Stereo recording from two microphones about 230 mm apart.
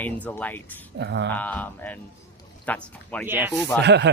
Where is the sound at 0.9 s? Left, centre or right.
Right.